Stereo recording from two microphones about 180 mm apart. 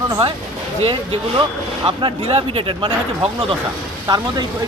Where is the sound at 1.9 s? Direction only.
30° right (ahead or behind).